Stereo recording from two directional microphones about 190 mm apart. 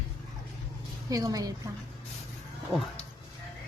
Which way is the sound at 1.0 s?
20° right (ahead or behind).